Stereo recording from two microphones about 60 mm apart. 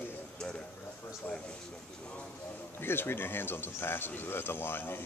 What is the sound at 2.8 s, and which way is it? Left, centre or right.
Speech, left.